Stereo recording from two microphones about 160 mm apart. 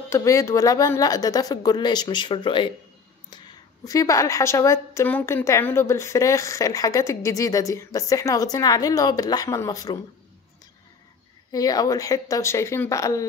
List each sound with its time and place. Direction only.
0.1 s a woman's voice: 20° left (ahead or behind)
3.8 s a woman's voice: 20° left (ahead or behind)
11.5 s a woman's voice: 25° left (ahead or behind)